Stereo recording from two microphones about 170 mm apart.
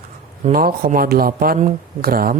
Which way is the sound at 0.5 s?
55° right (ahead or behind).